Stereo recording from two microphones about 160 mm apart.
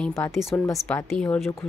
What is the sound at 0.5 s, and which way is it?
Speech, 15° left (ahead or behind).